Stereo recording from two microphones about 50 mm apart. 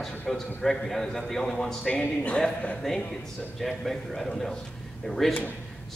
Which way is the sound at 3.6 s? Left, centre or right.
Centre.